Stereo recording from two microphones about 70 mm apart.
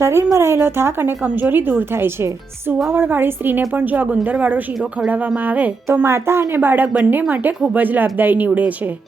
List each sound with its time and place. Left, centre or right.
0.0 s speech: right
5.9 s speech: right